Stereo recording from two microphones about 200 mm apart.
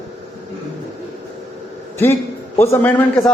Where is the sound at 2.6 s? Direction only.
10° left (ahead or behind).